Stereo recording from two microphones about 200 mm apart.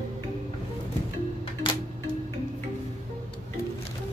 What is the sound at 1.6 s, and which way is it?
Music, 25° left (ahead or behind).